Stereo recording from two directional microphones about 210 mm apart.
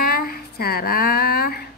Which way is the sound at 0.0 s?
45° left (ahead or behind).